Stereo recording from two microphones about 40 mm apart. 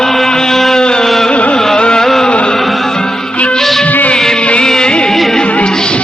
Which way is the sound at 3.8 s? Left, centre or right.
Left.